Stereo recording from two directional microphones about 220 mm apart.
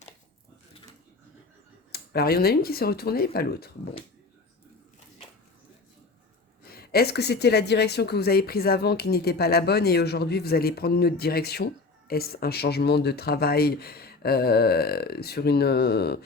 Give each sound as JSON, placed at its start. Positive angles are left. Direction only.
{"t": 1.9, "sound": "speech", "side_deg": 45}
{"t": 6.6, "sound": "speech", "side_deg": 45}